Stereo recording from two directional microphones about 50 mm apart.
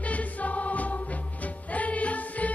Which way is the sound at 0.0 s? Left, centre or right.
Left.